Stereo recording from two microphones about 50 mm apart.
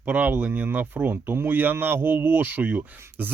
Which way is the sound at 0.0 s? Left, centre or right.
Right.